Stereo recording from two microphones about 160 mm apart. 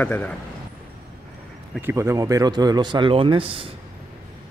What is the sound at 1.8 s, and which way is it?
Speech, 15° right (ahead or behind).